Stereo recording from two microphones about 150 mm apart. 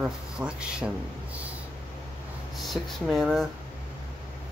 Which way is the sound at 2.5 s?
Centre (ahead or behind).